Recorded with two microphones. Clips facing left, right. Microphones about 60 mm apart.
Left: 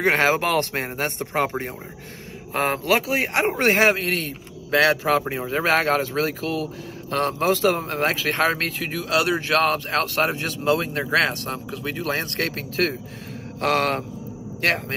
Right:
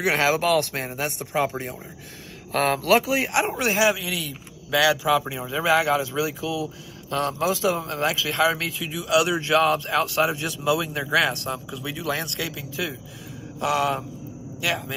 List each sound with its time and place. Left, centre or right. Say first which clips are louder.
0.0 s a man's voice: left 2 dB; left
2.5 s a man's voice: right 1 dB; left